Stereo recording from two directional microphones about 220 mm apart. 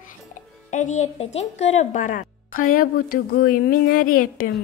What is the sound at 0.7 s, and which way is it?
Speech, 35° left (ahead or behind).